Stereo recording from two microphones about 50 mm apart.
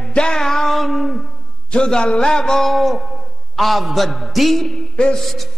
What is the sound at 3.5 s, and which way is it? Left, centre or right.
A man's voice, centre.